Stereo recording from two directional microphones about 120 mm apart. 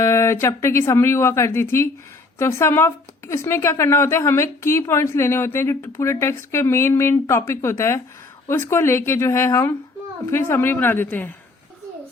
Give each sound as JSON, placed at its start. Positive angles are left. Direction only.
{"t": 0.0, "sound": "a woman's voice", "side_deg": 25}